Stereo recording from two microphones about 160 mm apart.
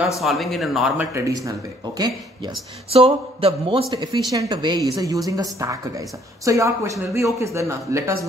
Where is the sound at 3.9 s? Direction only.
30° right (ahead or behind).